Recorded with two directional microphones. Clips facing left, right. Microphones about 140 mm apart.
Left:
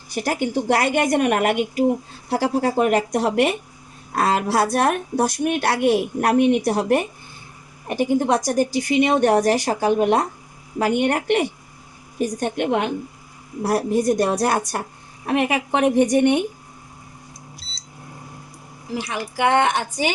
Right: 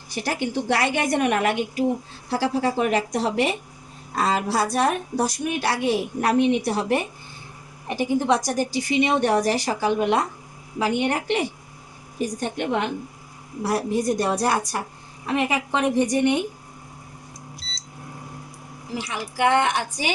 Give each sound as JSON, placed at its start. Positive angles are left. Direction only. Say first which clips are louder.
{"t": 0.1, "sound": "a woman's voice", "louder": "left 4 dB", "side_deg": 50}
{"t": 19.0, "sound": "speech", "louder": "left 1 dB", "side_deg": 55}